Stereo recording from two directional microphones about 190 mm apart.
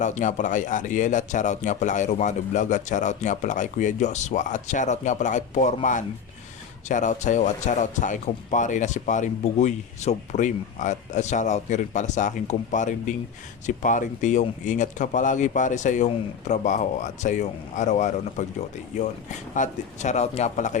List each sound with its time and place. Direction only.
0.0 s speech: 40° left (ahead or behind)